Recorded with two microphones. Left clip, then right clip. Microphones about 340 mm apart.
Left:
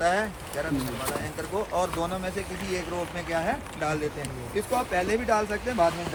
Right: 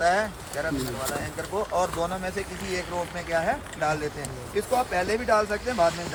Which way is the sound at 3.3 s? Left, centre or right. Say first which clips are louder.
Right 3 dB; right.